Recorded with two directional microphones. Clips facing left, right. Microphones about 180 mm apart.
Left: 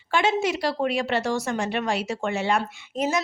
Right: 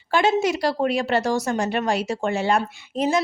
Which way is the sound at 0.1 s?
35° right (ahead or behind).